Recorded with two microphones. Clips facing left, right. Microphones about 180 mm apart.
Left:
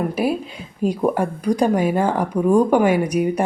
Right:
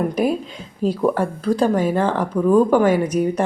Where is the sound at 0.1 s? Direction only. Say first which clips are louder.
Right 1 dB; 5° left (ahead or behind).